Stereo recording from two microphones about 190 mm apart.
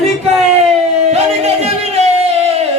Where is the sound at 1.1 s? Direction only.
35° right (ahead or behind).